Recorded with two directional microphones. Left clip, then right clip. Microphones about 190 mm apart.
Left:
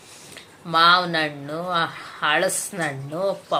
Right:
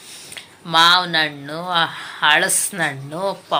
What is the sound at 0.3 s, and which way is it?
Speech, centre (ahead or behind).